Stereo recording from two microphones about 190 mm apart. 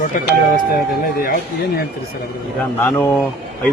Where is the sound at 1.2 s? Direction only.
50° left (ahead or behind).